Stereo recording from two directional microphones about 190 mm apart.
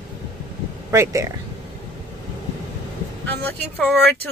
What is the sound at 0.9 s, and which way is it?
Speech, 15° right (ahead or behind).